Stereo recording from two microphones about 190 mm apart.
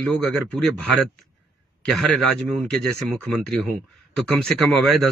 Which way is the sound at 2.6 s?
Centre (ahead or behind).